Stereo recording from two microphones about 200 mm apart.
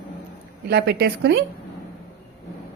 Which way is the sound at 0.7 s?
55° right (ahead or behind).